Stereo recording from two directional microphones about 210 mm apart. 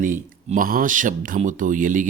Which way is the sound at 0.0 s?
40° right (ahead or behind).